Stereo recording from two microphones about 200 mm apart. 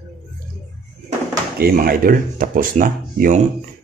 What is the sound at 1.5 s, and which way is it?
Speech, 50° right (ahead or behind).